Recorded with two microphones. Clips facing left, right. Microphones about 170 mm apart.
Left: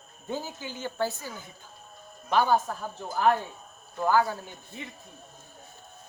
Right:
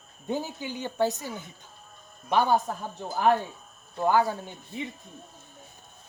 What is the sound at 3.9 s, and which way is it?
Speech, 20° right (ahead or behind).